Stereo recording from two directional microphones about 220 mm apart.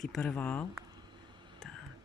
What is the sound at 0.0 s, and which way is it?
Speech, 5° left (ahead or behind).